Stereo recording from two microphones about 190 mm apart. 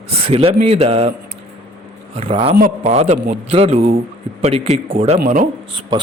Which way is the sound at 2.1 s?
30° right (ahead or behind).